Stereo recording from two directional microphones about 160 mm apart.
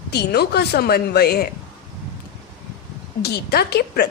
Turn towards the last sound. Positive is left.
turn(degrees=90)